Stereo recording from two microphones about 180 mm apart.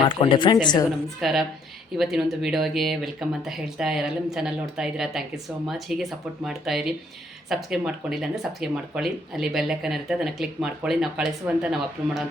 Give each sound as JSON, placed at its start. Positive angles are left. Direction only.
{"t": 0.0, "sound": "speech", "side_deg": 25}
{"t": 1.2, "sound": "speech", "side_deg": 0}